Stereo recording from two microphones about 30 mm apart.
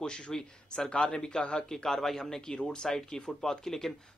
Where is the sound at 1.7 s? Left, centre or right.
Centre.